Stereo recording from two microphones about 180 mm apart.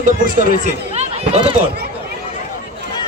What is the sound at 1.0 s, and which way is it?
Run, 35° right (ahead or behind).